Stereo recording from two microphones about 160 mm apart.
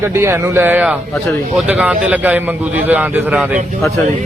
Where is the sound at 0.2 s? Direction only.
15° right (ahead or behind).